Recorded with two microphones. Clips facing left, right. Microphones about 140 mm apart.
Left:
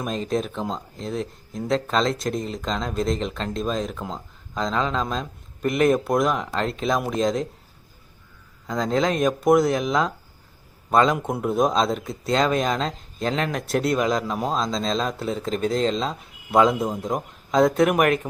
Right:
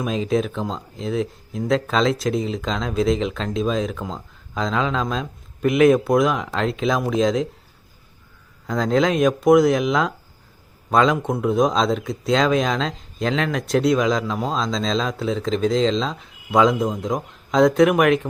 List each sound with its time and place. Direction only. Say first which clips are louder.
0.0 s speech: right 4 dB; centre (ahead or behind)
8.6 s speech: right 3 dB; centre (ahead or behind)